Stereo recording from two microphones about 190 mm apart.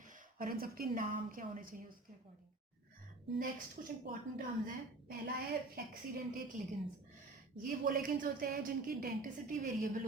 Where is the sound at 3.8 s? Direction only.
50° right (ahead or behind).